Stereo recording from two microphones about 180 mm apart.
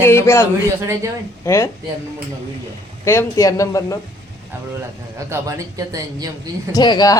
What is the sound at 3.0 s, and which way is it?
Speech, 15° left (ahead or behind).